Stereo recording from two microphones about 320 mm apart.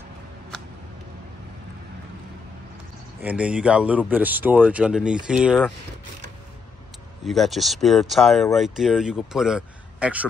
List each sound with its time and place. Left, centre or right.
3.2 s speech: centre
7.2 s speech: centre